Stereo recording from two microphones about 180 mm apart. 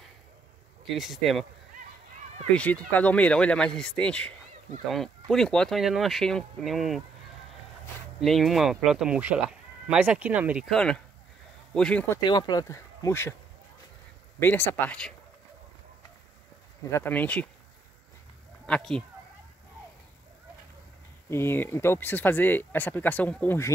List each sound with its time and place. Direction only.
0.8 s speech: centre (ahead or behind)
2.5 s speech: 5° left (ahead or behind)
5.3 s speech: 5° left (ahead or behind)
8.2 s speech: centre (ahead or behind)
12.2 s speech: 25° left (ahead or behind)
14.4 s speech: 10° left (ahead or behind)
16.9 s speech: 10° left (ahead or behind)
18.7 s speech: 5° left (ahead or behind)
21.3 s speech: 15° left (ahead or behind)